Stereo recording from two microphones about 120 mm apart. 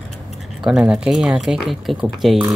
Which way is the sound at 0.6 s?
5° right (ahead or behind).